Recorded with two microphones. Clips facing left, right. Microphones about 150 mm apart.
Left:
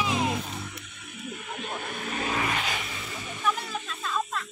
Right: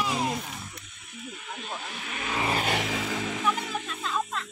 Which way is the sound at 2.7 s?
90° right.